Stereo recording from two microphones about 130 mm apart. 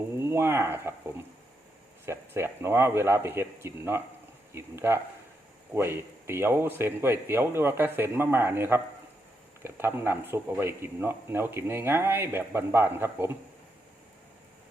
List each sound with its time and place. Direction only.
0.2 s speech: 20° right (ahead or behind)
2.0 s speech: 20° right (ahead or behind)